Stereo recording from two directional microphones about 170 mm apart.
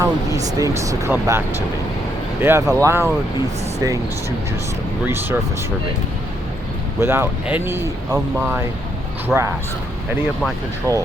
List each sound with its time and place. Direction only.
0.0 s speech: 20° right (ahead or behind)
5.0 s speech: 15° right (ahead or behind)
7.0 s speech: 15° right (ahead or behind)
10.9 s speech: 20° right (ahead or behind)